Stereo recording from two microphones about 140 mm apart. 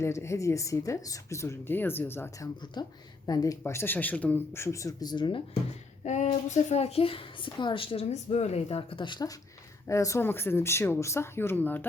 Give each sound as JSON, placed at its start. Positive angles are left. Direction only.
{"t": 0.0, "sound": "speech", "side_deg": 20}
{"t": 2.8, "sound": "speech", "side_deg": 30}
{"t": 6.1, "sound": "speech", "side_deg": 55}
{"t": 9.8, "sound": "speech", "side_deg": 20}